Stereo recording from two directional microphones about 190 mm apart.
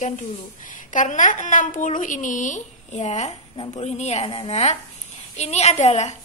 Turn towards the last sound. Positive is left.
turn(degrees=35)  # may be behind; listen again after turning